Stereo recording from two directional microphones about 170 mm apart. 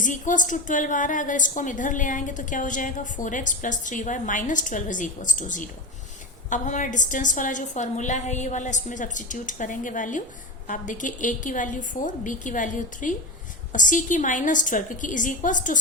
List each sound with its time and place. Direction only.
0.0 s a woman's voice: 50° left (ahead or behind)